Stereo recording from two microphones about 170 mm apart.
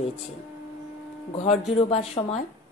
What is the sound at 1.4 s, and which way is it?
Speech, 40° left (ahead or behind).